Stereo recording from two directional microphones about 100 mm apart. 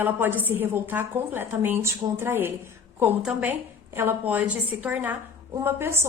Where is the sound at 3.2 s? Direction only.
10° right (ahead or behind).